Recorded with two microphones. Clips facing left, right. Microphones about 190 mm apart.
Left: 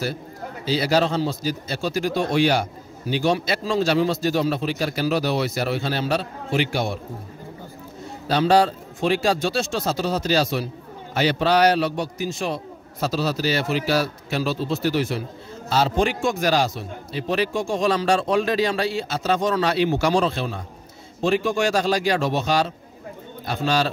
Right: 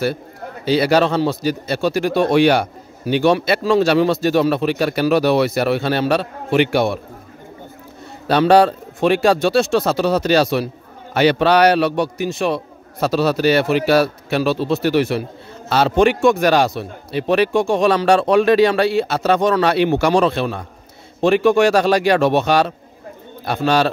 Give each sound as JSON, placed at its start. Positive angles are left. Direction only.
{"t": 0.7, "sound": "speech", "side_deg": -65}
{"t": 8.3, "sound": "speech", "side_deg": -65}